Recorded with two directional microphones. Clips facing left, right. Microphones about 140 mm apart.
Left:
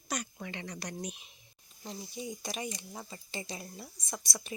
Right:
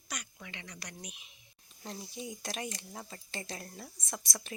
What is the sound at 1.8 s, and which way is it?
Speech, centre (ahead or behind).